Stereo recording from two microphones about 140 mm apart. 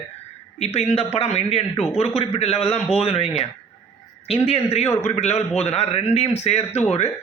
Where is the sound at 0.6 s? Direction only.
50° left (ahead or behind).